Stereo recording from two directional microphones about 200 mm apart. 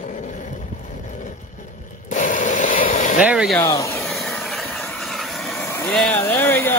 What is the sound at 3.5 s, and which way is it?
Speech, 15° left (ahead or behind).